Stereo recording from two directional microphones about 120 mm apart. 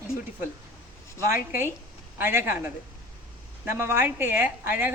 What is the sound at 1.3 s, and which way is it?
A woman's voice, 20° right (ahead or behind).